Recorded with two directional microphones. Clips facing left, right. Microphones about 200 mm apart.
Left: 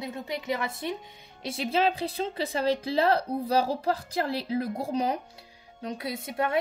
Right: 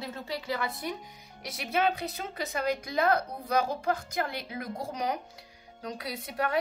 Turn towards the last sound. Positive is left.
turn(degrees=25)  # may be behind; listen again after turning